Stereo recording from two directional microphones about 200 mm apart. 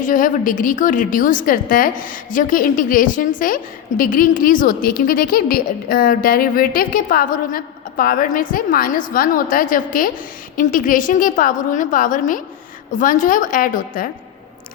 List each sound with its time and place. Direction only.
0.0 s a woman's voice: 40° left (ahead or behind)